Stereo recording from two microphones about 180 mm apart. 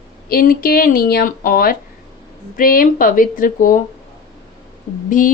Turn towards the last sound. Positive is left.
turn(degrees=45)  # may be behind; listen again after turning